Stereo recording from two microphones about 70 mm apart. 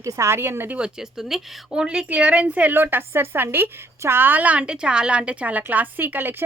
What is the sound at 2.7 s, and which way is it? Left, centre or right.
A woman's voice, right.